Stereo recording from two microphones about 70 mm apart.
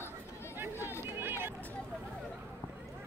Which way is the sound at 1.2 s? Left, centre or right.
Right.